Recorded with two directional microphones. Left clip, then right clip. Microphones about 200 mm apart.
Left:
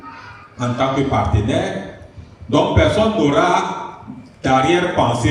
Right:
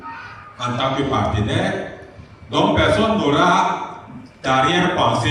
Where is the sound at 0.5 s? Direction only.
45° left (ahead or behind).